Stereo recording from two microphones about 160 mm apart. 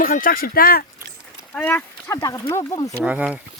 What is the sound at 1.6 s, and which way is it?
Speech, 15° left (ahead or behind).